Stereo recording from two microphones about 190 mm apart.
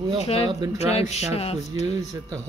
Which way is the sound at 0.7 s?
35° left (ahead or behind).